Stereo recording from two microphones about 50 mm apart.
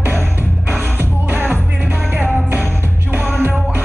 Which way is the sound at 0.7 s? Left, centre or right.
Right.